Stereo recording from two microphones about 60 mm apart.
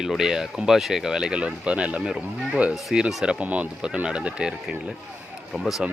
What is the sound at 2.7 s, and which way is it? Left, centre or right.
Speech, centre.